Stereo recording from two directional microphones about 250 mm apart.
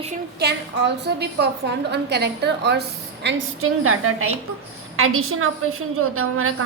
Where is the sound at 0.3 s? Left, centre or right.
Right.